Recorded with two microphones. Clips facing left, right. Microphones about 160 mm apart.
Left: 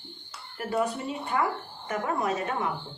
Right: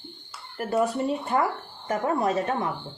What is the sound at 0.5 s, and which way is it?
A woman's voice, 40° right (ahead or behind).